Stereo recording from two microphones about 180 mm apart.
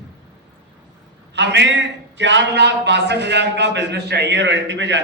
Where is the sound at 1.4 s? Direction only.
75° right (ahead or behind).